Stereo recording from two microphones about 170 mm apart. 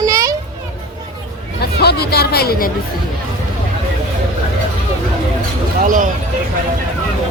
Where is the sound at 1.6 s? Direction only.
70° left (ahead or behind).